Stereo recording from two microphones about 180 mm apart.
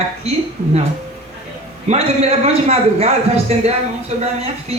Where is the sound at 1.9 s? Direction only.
35° right (ahead or behind).